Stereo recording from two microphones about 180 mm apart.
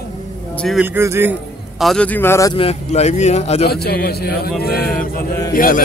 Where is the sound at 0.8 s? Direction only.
10° right (ahead or behind).